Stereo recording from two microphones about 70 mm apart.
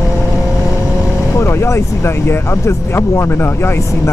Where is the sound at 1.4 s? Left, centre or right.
Left.